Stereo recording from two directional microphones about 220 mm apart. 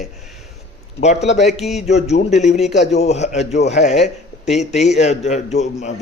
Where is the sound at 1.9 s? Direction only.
30° left (ahead or behind).